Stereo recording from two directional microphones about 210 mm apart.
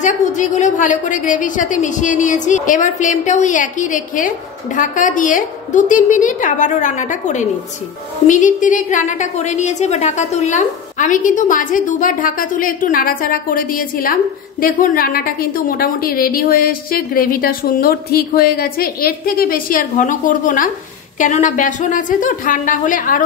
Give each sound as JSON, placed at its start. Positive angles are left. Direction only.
{"t": 0.0, "sound": "a woman's voice", "side_deg": 35}